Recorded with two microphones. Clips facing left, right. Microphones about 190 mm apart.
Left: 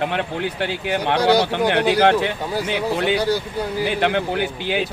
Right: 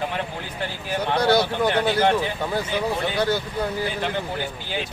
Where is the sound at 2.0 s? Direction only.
70° left (ahead or behind).